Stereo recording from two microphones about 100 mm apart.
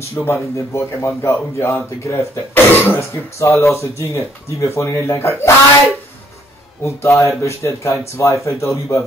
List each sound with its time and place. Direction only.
0.3 s speech: 25° left (ahead or behind)
6.8 s speech: 30° left (ahead or behind)